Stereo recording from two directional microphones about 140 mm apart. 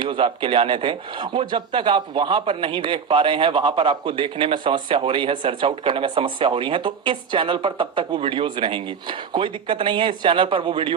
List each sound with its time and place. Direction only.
0.0 s a man's voice: 35° right (ahead or behind)